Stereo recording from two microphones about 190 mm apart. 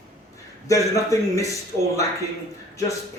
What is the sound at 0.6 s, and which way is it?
A man's voice, 15° left (ahead or behind).